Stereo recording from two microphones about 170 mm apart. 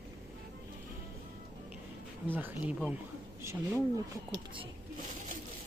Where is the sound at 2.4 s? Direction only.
10° right (ahead or behind).